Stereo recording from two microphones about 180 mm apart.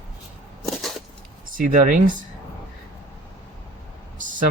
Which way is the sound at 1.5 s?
50° right (ahead or behind).